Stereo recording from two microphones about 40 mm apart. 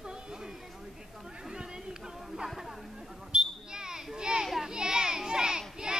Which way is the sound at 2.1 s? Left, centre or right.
Centre.